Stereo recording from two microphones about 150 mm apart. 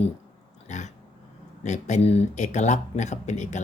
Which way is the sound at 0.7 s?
55° left (ahead or behind).